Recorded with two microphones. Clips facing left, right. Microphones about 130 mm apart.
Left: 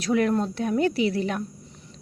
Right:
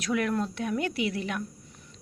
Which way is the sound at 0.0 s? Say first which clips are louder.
Left 5 dB; 35° left (ahead or behind).